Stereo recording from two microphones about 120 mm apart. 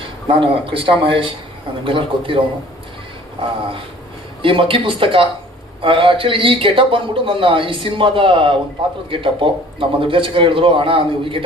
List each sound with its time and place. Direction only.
0.3 s a man's voice: 45° right (ahead or behind)